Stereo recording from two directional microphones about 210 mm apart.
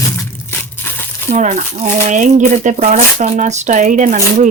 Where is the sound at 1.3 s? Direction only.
35° right (ahead or behind).